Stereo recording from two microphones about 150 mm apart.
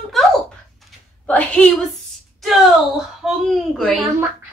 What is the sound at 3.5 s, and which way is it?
Speech, centre (ahead or behind).